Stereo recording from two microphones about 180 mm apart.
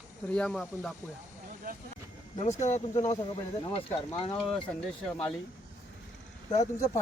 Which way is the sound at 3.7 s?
30° left (ahead or behind).